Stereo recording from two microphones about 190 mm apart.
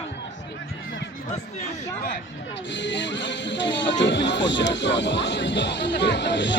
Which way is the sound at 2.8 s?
70° left (ahead or behind).